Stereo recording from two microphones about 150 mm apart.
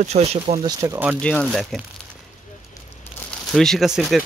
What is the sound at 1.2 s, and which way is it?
Speech, centre (ahead or behind).